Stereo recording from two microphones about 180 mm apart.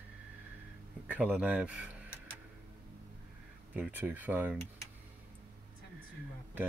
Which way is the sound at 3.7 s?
10° right (ahead or behind).